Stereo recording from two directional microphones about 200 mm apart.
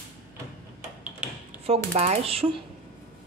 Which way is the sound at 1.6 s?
30° right (ahead or behind).